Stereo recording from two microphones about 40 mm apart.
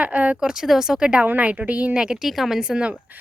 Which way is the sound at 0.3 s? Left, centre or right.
Centre.